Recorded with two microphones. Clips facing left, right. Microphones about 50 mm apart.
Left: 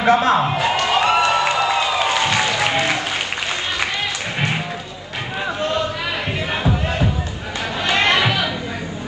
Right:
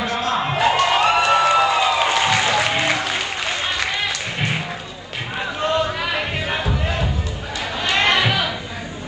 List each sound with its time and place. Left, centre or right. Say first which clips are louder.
0.0 s speech: left 7 dB; left
0.6 s music: right 1 dB; centre
1.6 s applause: right 1 dB; centre
6.5 s music: left 4 dB; centre
7.9 s chatter: left 1 dB; centre